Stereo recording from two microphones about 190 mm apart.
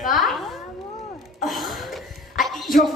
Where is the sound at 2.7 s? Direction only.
50° left (ahead or behind).